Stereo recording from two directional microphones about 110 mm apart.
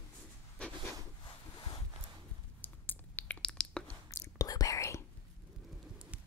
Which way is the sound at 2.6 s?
15° left (ahead or behind).